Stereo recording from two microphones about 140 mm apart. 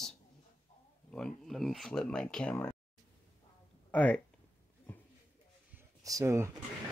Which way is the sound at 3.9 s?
10° left (ahead or behind).